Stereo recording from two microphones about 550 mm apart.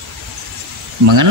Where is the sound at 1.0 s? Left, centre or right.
Right.